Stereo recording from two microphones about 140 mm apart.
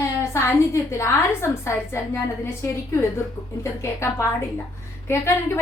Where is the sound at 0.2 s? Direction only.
20° left (ahead or behind).